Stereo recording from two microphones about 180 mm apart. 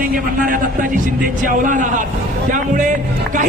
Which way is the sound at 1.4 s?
45° right (ahead or behind).